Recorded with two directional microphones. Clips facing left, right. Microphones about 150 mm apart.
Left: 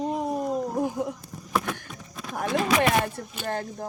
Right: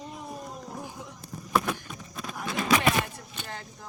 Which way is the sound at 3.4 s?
50° left (ahead or behind).